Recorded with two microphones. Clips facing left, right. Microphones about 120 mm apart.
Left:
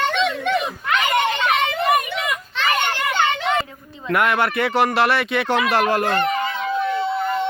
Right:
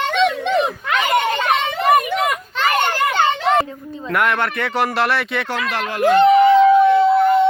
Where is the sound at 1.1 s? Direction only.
40° right (ahead or behind).